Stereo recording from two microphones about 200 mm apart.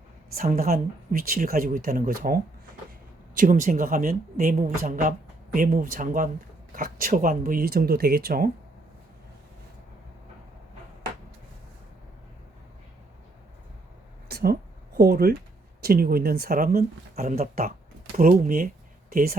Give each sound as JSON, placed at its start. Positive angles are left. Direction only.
{"t": 0.3, "sound": "speech", "side_deg": -45}
{"t": 14.3, "sound": "a sound", "side_deg": -50}
{"t": 15.8, "sound": "speech", "side_deg": -50}